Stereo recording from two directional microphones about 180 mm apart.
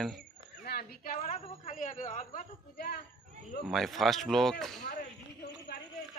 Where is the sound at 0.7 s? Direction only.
55° left (ahead or behind).